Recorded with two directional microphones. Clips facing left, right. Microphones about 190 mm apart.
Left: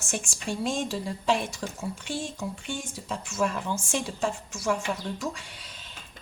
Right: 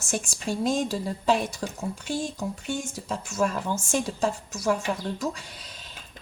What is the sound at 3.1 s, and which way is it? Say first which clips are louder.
A woman's voice: right 2 dB; 40° right (ahead or behind).